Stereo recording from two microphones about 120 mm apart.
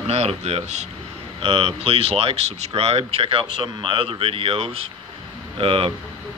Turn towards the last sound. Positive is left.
turn(degrees=-45)  # may be behind; listen again after turning